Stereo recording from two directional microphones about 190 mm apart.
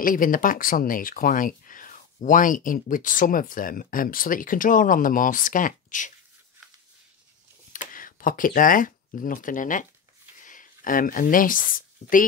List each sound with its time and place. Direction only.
0.0 s speech: 45° left (ahead or behind)
7.7 s speech: 45° left (ahead or behind)